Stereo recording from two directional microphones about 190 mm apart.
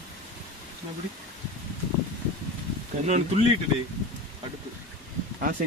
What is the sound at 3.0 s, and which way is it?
Speech, 35° right (ahead or behind).